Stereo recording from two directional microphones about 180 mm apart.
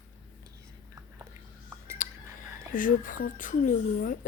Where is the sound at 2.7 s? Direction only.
50° left (ahead or behind).